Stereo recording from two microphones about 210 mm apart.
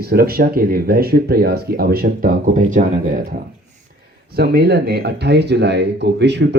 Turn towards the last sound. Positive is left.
turn(degrees=-55)  # may be behind; listen again after turning